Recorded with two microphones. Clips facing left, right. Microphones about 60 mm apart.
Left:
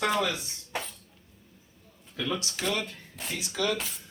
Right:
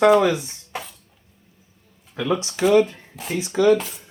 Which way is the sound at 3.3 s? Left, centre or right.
Right.